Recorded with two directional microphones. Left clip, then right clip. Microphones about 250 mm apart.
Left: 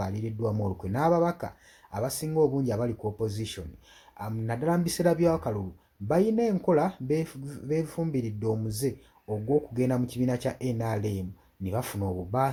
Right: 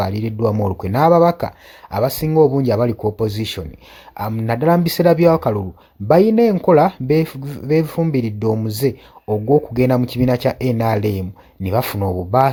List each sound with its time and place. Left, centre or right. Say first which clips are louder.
0.0 s speech: right 13 dB; right